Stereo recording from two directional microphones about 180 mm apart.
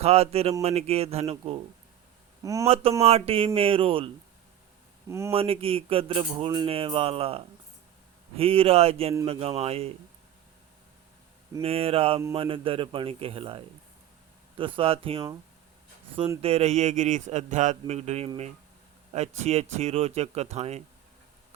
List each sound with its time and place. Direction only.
0.0 s speech: 35° right (ahead or behind)
2.4 s a man's voice: 20° right (ahead or behind)
2.6 s speech: 30° right (ahead or behind)
5.0 s speech: 15° right (ahead or behind)
5.3 s speech: 30° right (ahead or behind)
11.6 s a man's voice: 30° right (ahead or behind)
16.4 s speech: 35° right (ahead or behind)